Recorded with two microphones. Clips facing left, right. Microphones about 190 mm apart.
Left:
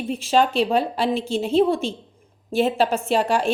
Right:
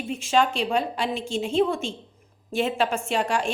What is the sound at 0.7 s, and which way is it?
Speech, 35° left (ahead or behind).